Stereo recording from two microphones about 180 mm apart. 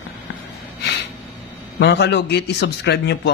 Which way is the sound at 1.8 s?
70° left (ahead or behind).